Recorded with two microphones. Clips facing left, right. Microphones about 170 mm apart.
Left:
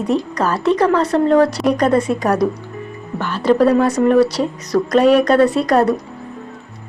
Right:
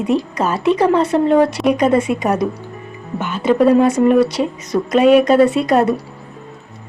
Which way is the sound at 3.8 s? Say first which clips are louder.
Right 2 dB; 25° right (ahead or behind).